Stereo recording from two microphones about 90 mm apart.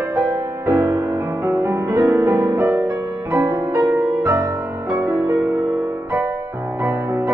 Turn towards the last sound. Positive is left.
turn(degrees=-35)  # may be behind; listen again after turning